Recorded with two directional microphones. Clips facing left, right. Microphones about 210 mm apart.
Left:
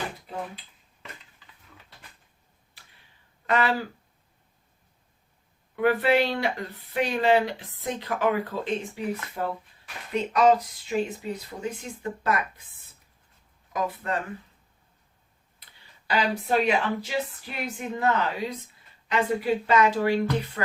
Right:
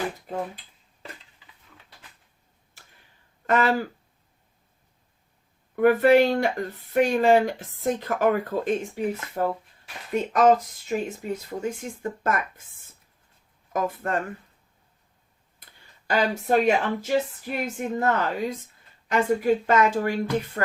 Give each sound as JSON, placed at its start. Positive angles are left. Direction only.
{"t": 0.3, "sound": "speech", "side_deg": -45}
{"t": 3.4, "sound": "speech", "side_deg": -45}
{"t": 5.7, "sound": "speech", "side_deg": -45}
{"t": 13.7, "sound": "speech", "side_deg": -50}
{"t": 15.6, "sound": "speech", "side_deg": -45}